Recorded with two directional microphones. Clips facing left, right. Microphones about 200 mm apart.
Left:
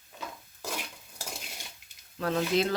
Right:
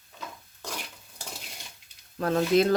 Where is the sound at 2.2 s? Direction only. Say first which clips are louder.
Right 5 dB; 45° right (ahead or behind).